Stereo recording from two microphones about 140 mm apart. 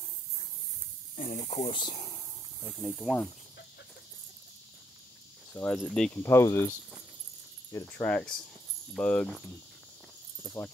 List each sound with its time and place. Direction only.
1.1 s speech: 55° left (ahead or behind)
1.7 s speech: 35° left (ahead or behind)
2.8 s speech: centre (ahead or behind)
5.5 s speech: 10° left (ahead or behind)
6.1 s speech: 20° left (ahead or behind)
7.7 s speech: 10° left (ahead or behind)